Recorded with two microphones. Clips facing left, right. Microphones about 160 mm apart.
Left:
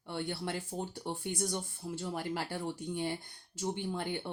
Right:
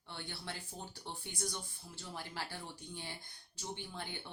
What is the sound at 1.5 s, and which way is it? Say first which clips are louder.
Speech: left 10 dB; 60° left (ahead or behind).